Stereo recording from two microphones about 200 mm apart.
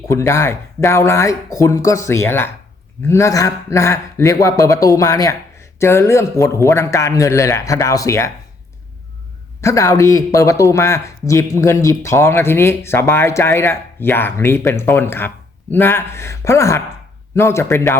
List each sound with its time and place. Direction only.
0.1 s speech: 15° left (ahead or behind)
9.6 s speech: 15° left (ahead or behind)